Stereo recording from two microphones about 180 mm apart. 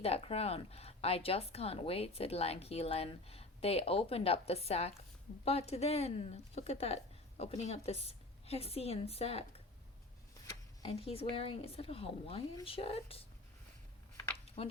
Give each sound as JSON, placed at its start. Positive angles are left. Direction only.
{"t": 0.0, "sound": "a woman's voice", "side_deg": 35}
{"t": 10.8, "sound": "a woman's voice", "side_deg": 30}
{"t": 14.6, "sound": "a woman's voice", "side_deg": 30}